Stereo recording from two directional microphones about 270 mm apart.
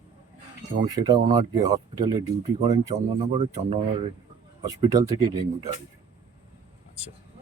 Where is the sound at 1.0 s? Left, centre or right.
Centre.